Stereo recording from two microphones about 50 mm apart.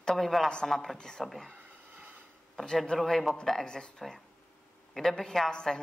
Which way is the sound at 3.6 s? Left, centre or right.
Centre.